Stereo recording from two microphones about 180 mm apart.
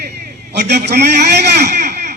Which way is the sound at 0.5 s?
65° right (ahead or behind).